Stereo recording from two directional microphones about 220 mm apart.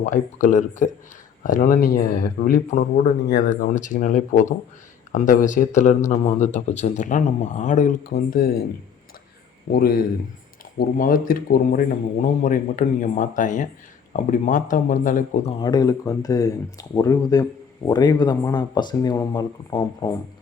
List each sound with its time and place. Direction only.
0.0 s speech: 35° left (ahead or behind)
9.7 s speech: 40° left (ahead or behind); by 20.1 s 15° left (ahead or behind)